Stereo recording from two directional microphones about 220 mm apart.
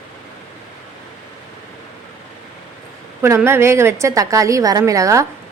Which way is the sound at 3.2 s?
10° right (ahead or behind).